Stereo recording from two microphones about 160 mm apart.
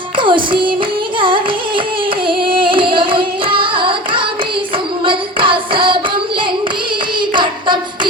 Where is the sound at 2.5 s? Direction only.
30° right (ahead or behind).